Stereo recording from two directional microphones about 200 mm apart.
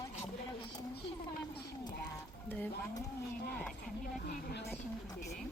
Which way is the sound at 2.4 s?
10° left (ahead or behind).